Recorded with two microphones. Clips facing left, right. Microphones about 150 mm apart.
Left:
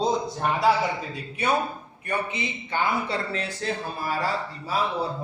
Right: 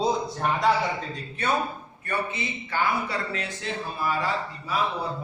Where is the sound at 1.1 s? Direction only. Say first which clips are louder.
Left 2 dB; 10° left (ahead or behind).